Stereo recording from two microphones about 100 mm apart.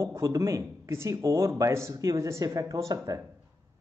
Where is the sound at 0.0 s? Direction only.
30° right (ahead or behind).